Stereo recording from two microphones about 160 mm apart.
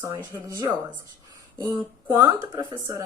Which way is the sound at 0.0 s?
20° right (ahead or behind).